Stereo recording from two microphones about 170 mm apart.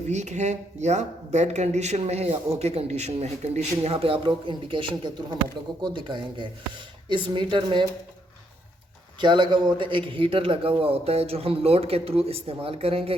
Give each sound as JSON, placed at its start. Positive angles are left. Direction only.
{"t": 0.1, "sound": "a woman's voice", "side_deg": -45}
{"t": 9.2, "sound": "speech", "side_deg": -25}